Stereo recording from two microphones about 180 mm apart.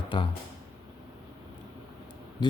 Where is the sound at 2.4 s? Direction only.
25° left (ahead or behind).